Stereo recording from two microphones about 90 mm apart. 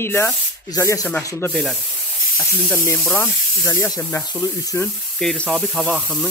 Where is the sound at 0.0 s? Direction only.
25° left (ahead or behind).